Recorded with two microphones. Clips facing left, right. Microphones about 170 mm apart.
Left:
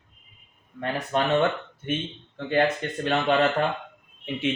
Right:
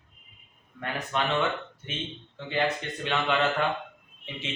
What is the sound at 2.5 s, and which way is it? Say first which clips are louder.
Speech: left 5 dB; 50° left (ahead or behind).